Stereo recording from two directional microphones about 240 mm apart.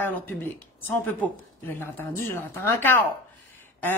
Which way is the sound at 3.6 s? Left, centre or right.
Centre.